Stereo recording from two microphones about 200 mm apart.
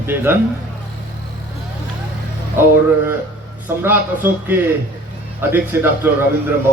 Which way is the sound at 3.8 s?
10° right (ahead or behind).